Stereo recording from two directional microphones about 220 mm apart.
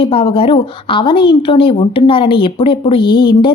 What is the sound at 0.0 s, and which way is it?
A woman's voice, 25° left (ahead or behind).